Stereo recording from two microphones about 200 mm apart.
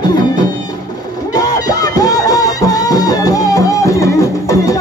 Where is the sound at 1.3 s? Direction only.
20° left (ahead or behind).